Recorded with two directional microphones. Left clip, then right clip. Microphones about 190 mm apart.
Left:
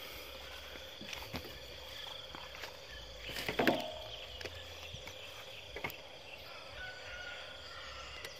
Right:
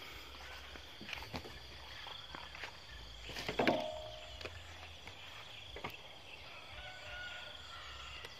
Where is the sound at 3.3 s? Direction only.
35° left (ahead or behind).